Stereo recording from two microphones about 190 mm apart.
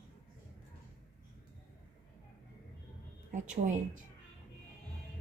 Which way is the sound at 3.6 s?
40° right (ahead or behind).